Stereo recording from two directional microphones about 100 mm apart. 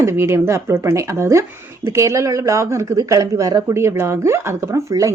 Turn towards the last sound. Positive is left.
turn(degrees=-30)  # may be behind; listen again after turning